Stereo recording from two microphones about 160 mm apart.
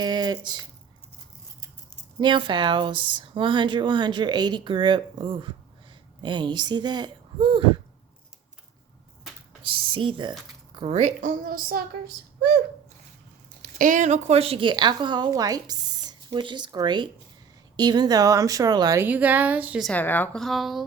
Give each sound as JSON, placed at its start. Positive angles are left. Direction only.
{"t": 0.0, "sound": "speech", "side_deg": -25}
{"t": 2.2, "sound": "a woman's voice", "side_deg": -30}
{"t": 9.6, "sound": "speech", "side_deg": -30}
{"t": 13.6, "sound": "a woman's voice", "side_deg": -55}
{"t": 19.0, "sound": "a woman's voice", "side_deg": -10}
{"t": 19.9, "sound": "speech", "side_deg": 10}